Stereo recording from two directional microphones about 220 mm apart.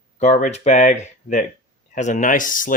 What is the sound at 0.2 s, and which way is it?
Speech, 35° left (ahead or behind).